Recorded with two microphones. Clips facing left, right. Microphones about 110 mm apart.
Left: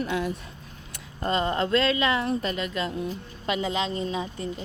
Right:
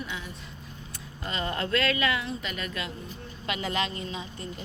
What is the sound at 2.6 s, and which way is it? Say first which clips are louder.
A woman's voice: left 6 dB; 25° left (ahead or behind).